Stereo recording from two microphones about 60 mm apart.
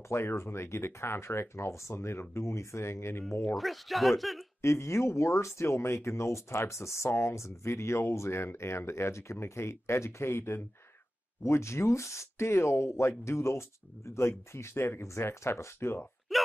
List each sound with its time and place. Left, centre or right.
0.1 s speech: left
3.4 s speech: centre
4.6 s speech: left
16.3 s hiccup: centre